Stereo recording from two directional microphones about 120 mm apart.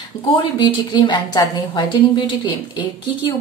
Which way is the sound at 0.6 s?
40° left (ahead or behind).